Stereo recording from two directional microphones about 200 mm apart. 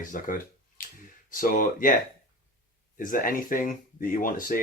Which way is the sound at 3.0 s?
45° left (ahead or behind).